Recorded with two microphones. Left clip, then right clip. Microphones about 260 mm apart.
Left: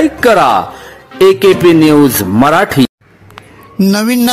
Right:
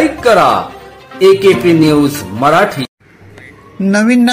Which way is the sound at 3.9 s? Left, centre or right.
Left.